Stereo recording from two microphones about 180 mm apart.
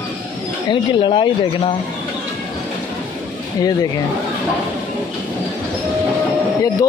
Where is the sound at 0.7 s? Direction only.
25° left (ahead or behind).